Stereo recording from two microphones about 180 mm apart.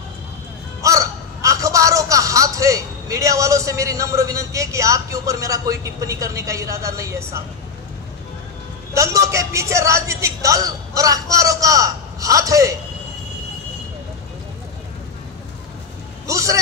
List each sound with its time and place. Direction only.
0.8 s a man's voice: 20° right (ahead or behind)
8.9 s a sound: 15° right (ahead or behind)
16.3 s vehicle: 20° right (ahead or behind)